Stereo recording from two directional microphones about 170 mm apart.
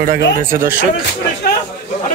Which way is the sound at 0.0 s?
55° right (ahead or behind).